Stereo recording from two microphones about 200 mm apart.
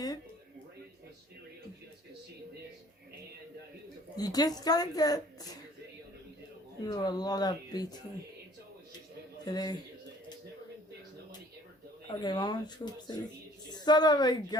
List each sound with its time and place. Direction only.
4.2 s speech: 20° left (ahead or behind)
6.8 s speech: 20° left (ahead or behind)
9.5 s speech: 20° left (ahead or behind)
12.0 s a woman's voice: 20° left (ahead or behind)